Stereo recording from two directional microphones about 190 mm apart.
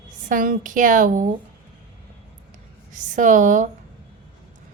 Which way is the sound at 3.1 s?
40° right (ahead or behind).